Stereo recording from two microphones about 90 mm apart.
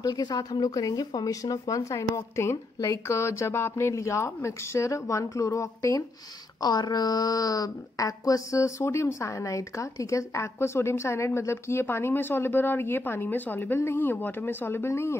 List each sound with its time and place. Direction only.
0.0 s speech: 45° left (ahead or behind)
6.6 s a woman's voice: 50° left (ahead or behind); by 15.1 s 30° left (ahead or behind)